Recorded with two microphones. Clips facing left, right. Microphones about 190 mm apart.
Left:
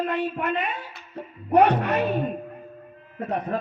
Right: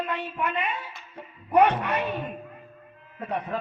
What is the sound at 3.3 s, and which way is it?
Speech, 45° left (ahead or behind).